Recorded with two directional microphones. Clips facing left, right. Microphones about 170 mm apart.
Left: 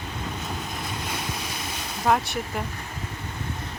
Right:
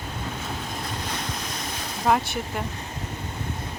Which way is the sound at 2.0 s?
Centre (ahead or behind).